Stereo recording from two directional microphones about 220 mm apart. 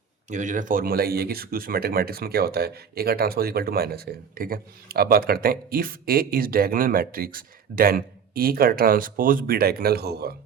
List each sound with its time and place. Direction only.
0.3 s speech: 35° right (ahead or behind)